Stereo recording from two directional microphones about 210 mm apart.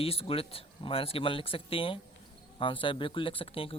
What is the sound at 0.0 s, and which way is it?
Speech, 25° left (ahead or behind).